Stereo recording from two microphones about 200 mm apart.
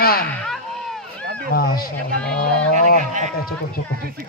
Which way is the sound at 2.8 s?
35° right (ahead or behind).